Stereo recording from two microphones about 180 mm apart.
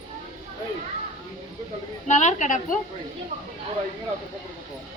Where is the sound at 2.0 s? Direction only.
40° left (ahead or behind).